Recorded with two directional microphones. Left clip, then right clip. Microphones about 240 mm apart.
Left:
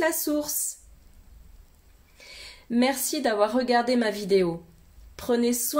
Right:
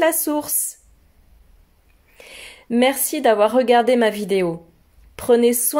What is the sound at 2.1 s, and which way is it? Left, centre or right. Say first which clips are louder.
A woman's voice: right 5 dB; right.